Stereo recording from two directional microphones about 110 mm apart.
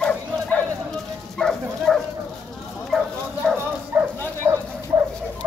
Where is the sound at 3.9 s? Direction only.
20° right (ahead or behind).